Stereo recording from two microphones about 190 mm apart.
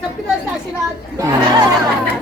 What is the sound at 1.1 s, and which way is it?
Speech, 20° right (ahead or behind).